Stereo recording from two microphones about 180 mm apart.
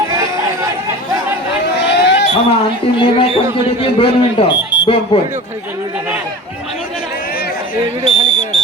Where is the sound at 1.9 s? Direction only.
70° left (ahead or behind).